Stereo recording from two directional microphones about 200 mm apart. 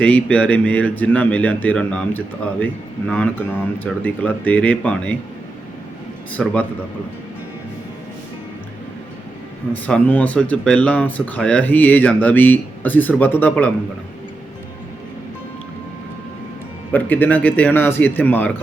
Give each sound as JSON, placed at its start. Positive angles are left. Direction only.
{"t": 0.0, "sound": "speech", "side_deg": 5}
{"t": 6.3, "sound": "speech", "side_deg": 5}
{"t": 9.8, "sound": "speech", "side_deg": 10}
{"t": 16.9, "sound": "speech", "side_deg": 10}